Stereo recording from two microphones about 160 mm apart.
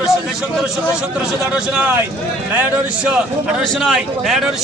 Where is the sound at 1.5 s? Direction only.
5° right (ahead or behind).